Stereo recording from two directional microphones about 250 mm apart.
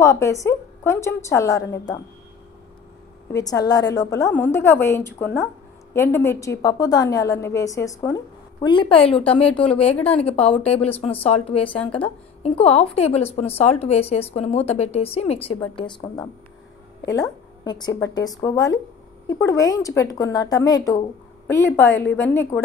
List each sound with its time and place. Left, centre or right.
0.0 s a woman's voice: centre
3.3 s a woman's voice: centre
17.6 s a woman's voice: centre